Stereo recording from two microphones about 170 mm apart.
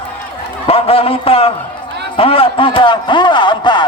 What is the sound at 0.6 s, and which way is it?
Speech, 35° left (ahead or behind).